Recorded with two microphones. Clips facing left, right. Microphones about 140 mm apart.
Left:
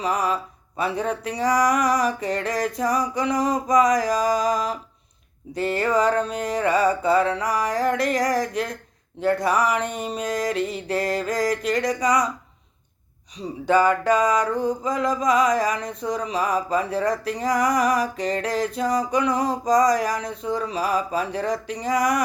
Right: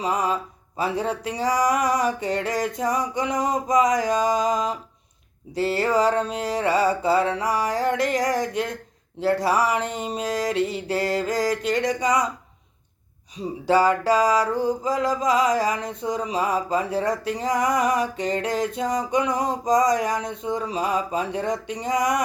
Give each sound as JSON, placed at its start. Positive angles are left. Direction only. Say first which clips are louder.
{"t": 0.0, "sound": "music", "louder": "even", "side_deg": -25}
{"t": 13.7, "sound": "music", "louder": "even", "side_deg": -30}